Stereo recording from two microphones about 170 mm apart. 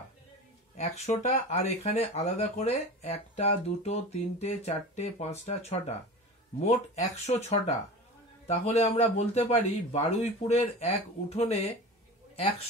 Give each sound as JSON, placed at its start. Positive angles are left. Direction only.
{"t": 0.7, "sound": "speech", "side_deg": 40}